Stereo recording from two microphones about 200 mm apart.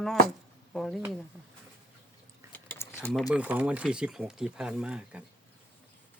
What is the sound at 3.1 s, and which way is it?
Speech, 5° right (ahead or behind).